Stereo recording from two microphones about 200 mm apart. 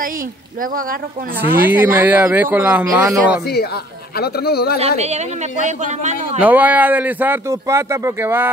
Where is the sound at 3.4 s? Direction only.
50° left (ahead or behind).